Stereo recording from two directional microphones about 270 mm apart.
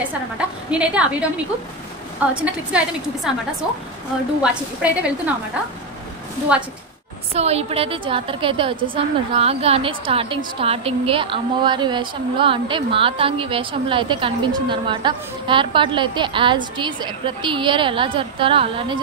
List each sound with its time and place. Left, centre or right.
0.4 s a woman's voice: centre
2.3 s a woman's voice: centre
4.4 s a woman's voice: centre
6.5 s a woman's voice: centre
7.3 s a woman's voice: right